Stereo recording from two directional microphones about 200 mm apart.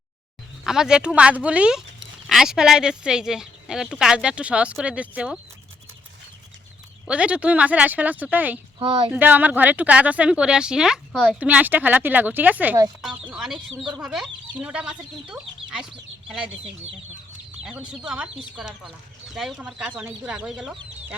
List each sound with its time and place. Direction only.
0.6 s speech: centre (ahead or behind)
7.1 s a woman's voice: 5° right (ahead or behind)
8.8 s speech: 25° right (ahead or behind)
9.1 s a woman's voice: 10° right (ahead or behind)
13.3 s speech: centre (ahead or behind)